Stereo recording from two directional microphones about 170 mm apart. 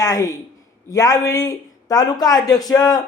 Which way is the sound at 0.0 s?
20° left (ahead or behind).